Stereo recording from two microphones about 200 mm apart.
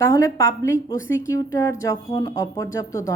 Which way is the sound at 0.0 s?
15° left (ahead or behind).